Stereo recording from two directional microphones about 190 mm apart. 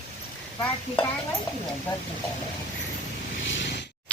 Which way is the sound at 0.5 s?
10° left (ahead or behind).